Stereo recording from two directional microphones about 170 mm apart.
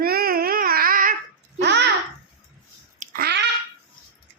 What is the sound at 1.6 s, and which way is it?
Babbling, 80° right.